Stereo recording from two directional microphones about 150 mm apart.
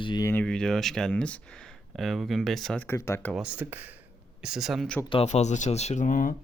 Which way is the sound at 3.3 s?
5° right (ahead or behind).